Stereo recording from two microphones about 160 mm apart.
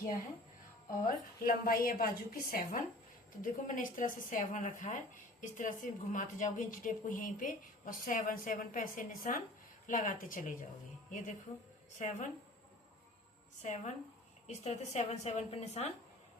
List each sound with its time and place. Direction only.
1.0 s a woman's voice: 65° left (ahead or behind)
11.9 s a woman's voice: 50° left (ahead or behind)
13.6 s a woman's voice: 50° left (ahead or behind)